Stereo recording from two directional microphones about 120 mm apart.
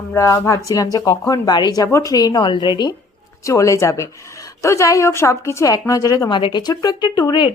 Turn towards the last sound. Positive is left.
turn(degrees=35)  # may be behind; listen again after turning